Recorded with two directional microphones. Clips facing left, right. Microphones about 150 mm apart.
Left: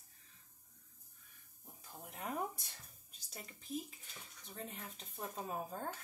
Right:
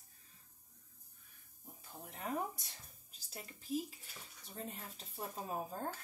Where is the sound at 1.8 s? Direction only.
Centre (ahead or behind).